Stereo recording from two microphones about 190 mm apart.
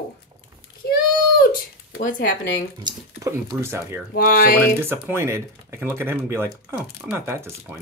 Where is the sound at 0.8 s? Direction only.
50° left (ahead or behind).